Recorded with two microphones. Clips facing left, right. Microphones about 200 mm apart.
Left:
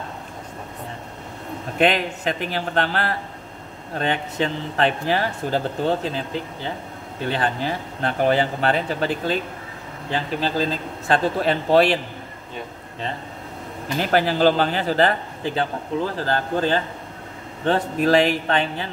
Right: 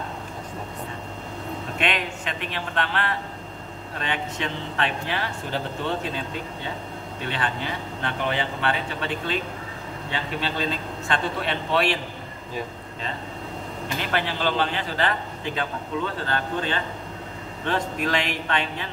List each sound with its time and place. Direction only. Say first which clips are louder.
1.8 s speech: left 9 dB; 35° left (ahead or behind)
14.1 s speech: left 8 dB; 40° left (ahead or behind)